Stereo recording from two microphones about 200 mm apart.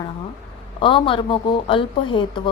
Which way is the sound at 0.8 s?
25° left (ahead or behind).